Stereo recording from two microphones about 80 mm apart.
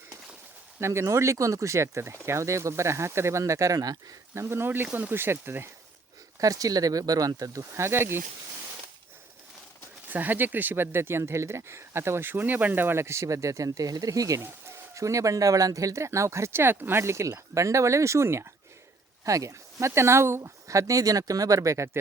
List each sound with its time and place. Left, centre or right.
0.8 s speech: right
4.4 s speech: right
6.4 s speech: right
10.1 s speech: right